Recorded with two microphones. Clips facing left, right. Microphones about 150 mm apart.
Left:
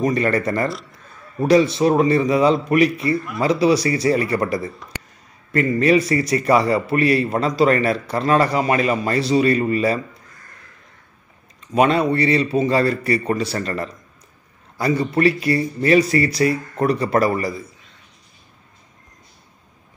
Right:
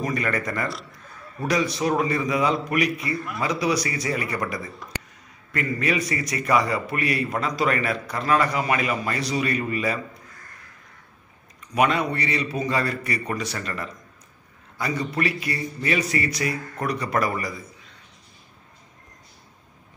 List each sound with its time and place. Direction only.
0.0 s a man's voice: 30° left (ahead or behind)
11.6 s a man's voice: 30° left (ahead or behind)